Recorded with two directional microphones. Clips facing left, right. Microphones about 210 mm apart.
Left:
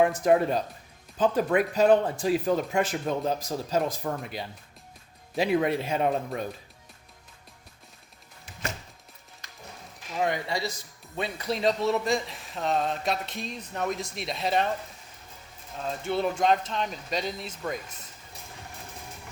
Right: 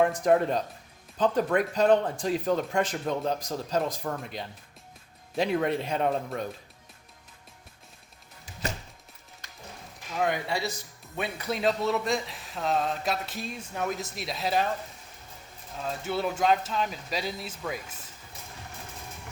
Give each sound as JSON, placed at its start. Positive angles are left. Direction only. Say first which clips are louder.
{"t": 0.0, "sound": "speech", "louder": "left 1 dB", "side_deg": 5}
{"t": 10.4, "sound": "a man's voice", "louder": "even", "side_deg": 25}
{"t": 11.5, "sound": "speech", "louder": "left 1 dB", "side_deg": 0}
{"t": 15.8, "sound": "speech", "louder": "left 2 dB", "side_deg": -5}